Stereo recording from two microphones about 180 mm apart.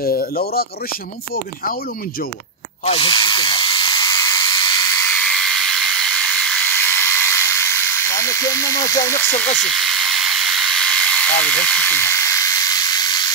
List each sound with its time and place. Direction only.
0.0 s speech: 50° left (ahead or behind)
2.8 s drill: 30° left (ahead or behind)
5.2 s a sound: centre (ahead or behind)
8.0 s speech: 15° left (ahead or behind)
9.6 s electric toothbrush: centre (ahead or behind)